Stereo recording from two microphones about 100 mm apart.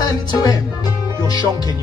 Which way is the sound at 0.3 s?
40° left (ahead or behind).